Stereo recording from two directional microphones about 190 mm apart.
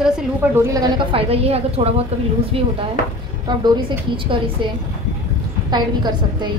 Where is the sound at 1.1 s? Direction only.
30° right (ahead or behind).